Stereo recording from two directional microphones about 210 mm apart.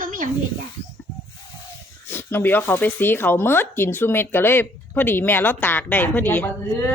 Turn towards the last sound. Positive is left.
turn(degrees=10)  # may be behind; listen again after turning